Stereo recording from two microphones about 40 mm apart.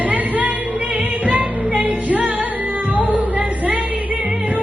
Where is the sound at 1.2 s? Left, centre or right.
Right.